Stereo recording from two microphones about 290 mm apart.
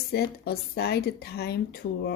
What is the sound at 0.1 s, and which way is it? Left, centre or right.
Speech, left.